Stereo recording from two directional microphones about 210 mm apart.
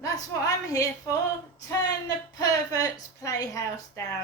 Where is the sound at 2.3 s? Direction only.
15° left (ahead or behind).